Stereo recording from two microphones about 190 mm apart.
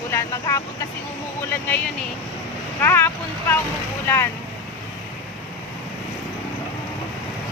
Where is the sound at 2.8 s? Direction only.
10° left (ahead or behind).